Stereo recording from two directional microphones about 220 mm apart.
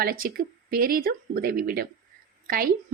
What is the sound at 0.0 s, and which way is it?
Speech, 40° right (ahead or behind).